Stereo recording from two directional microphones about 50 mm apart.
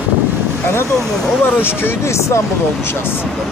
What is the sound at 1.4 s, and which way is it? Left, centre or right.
Speech, left.